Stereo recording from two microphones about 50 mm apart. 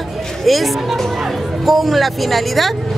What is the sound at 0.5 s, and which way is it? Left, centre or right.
Speech, centre.